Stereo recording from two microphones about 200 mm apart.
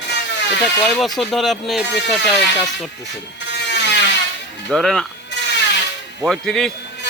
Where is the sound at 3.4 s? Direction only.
60° left (ahead or behind).